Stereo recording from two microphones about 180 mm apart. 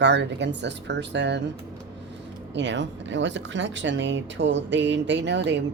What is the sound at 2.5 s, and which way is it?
Speech, 80° right.